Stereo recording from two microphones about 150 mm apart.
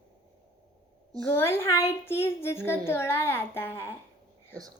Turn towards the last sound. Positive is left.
turn(degrees=15)  # may be behind; listen again after turning